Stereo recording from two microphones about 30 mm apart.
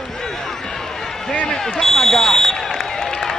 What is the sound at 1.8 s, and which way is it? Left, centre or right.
Fire alarm, centre.